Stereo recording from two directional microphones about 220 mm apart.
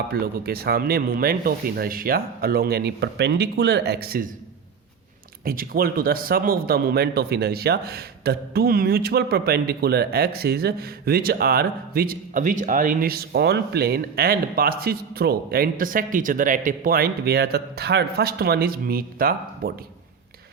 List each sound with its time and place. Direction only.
0.1 s a man's voice: 45° right (ahead or behind)
5.5 s a man's voice: 40° right (ahead or behind)